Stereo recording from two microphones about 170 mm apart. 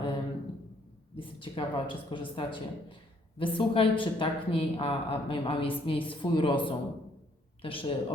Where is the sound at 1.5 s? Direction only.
30° left (ahead or behind).